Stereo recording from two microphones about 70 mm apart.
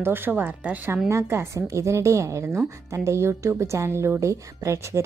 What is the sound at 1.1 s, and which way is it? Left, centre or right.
A woman's voice, right.